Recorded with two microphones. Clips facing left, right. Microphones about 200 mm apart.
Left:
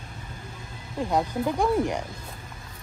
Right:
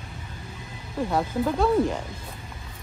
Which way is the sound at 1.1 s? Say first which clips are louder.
Even; 15° left (ahead or behind).